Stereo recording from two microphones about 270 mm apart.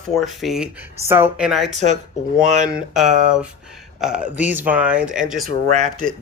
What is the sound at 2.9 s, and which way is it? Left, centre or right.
Speech, centre.